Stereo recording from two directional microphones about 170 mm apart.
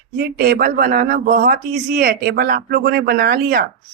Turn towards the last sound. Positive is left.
turn(degrees=-60)  # may be behind; listen again after turning